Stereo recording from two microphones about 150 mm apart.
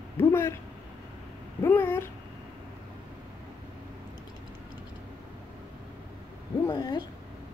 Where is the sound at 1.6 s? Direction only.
15° left (ahead or behind).